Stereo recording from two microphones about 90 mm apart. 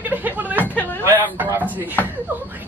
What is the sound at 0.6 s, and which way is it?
Speech, 20° left (ahead or behind).